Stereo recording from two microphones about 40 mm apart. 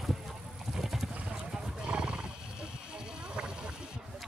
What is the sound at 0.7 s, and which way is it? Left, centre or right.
Vehicle, centre.